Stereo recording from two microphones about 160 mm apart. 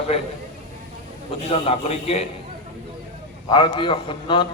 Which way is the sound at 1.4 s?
40° left (ahead or behind).